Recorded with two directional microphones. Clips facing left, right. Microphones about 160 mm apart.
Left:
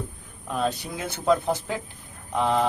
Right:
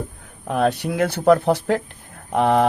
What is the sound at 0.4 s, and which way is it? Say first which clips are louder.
Speech: right 7 dB; 65° right (ahead or behind).